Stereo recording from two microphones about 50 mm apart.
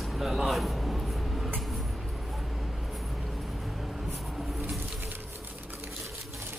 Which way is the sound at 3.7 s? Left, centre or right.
Centre.